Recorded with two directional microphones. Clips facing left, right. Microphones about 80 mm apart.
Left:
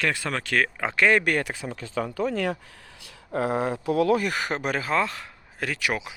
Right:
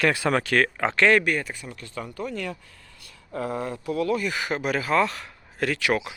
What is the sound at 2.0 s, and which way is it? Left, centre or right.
Speech, left.